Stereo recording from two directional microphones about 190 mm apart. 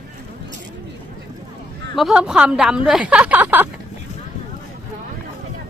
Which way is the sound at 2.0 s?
5° right (ahead or behind).